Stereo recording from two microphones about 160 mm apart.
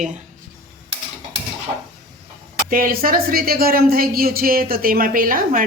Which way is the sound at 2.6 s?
60° right (ahead or behind).